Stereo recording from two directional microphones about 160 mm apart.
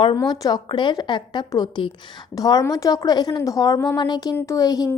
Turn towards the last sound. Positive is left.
turn(degrees=25)  # may be behind; listen again after turning